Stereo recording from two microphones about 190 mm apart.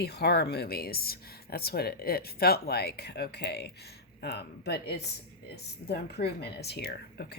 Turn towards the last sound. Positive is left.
turn(degrees=60)  # may be behind; listen again after turning